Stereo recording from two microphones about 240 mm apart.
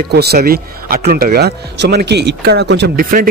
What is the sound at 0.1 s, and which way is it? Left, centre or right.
Speech, right.